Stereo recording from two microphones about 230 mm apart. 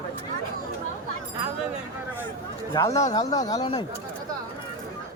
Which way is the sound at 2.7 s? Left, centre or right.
Centre.